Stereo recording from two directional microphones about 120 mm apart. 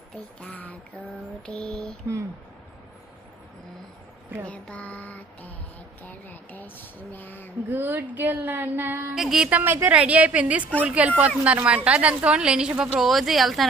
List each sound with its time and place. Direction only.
0.1 s speech: 10° left (ahead or behind)
4.4 s mantra: 10° left (ahead or behind)
6.0 s a sound: 15° left (ahead or behind)
7.7 s a woman's voice: 15° right (ahead or behind)
9.1 s a woman's voice: centre (ahead or behind)
9.5 s a woman's voice: 15° right (ahead or behind); by 13.7 s centre (ahead or behind)